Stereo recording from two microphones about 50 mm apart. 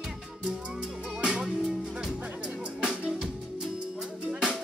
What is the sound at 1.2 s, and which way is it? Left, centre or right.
Music, centre.